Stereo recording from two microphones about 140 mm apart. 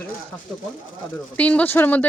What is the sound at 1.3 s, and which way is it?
Speech, 10° left (ahead or behind).